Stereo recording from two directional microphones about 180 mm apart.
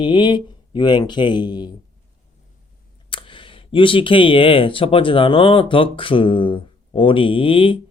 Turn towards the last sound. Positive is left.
turn(degrees=30)  # may be behind; listen again after turning